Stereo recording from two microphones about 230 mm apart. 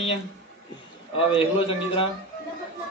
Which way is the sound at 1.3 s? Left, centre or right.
Left.